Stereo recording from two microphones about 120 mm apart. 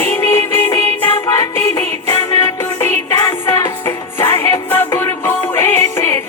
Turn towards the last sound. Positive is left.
turn(degrees=25)  # may be behind; listen again after turning